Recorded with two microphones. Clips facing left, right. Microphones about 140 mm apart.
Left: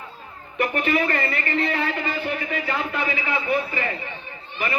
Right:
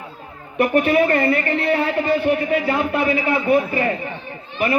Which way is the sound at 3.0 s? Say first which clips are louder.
Right 7 dB; 35° right (ahead or behind).